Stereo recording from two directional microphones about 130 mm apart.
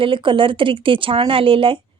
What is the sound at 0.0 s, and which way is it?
Speech, 40° right (ahead or behind).